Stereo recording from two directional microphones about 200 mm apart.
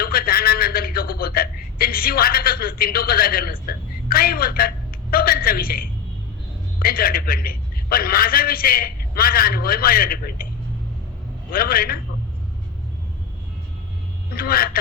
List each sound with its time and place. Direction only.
0.0 s a sound: 50° left (ahead or behind)
6.7 s a man's voice: 50° left (ahead or behind)
11.5 s a man's voice: 50° left (ahead or behind)
14.3 s a man's voice: 50° left (ahead or behind)